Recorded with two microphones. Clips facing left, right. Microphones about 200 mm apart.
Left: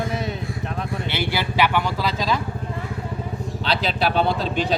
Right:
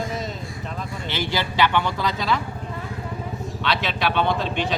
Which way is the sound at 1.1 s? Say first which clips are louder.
Even; 15° left (ahead or behind).